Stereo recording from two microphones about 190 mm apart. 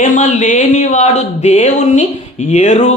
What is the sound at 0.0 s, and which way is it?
Speech, 40° left (ahead or behind).